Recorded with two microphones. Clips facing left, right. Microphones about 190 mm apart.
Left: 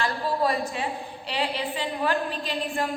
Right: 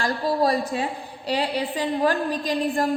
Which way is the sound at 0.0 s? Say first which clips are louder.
Right 3 dB; 40° right (ahead or behind).